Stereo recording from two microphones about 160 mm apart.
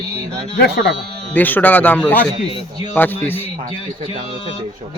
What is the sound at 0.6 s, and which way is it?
Speech, 90° left.